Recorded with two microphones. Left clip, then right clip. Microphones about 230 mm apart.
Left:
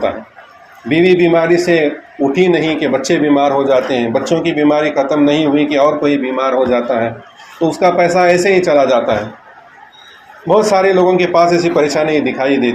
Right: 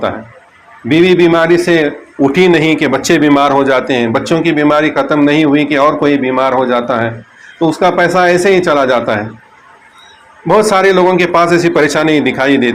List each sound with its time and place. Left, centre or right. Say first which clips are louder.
0.9 s a man's voice: right 2 dB; right
10.4 s a man's voice: right 2 dB; right